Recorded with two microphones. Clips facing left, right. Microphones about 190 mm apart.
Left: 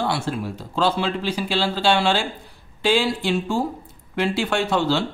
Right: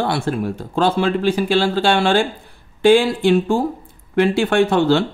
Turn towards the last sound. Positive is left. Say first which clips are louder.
# right 6 dB
turn(degrees=-55)  # may be behind; listen again after turning